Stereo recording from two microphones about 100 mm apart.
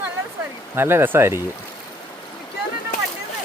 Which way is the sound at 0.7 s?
25° right (ahead or behind).